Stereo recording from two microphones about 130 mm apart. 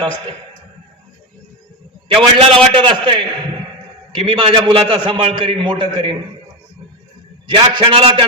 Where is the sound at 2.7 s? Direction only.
40° right (ahead or behind).